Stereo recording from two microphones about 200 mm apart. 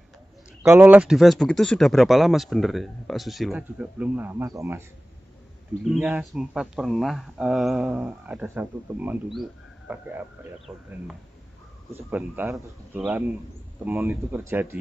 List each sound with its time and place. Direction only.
0.6 s speech: 10° right (ahead or behind)
5.9 s speech: 5° right (ahead or behind)
11.9 s speech: 10° right (ahead or behind)